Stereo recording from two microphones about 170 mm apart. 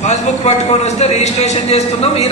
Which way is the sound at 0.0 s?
40° left (ahead or behind).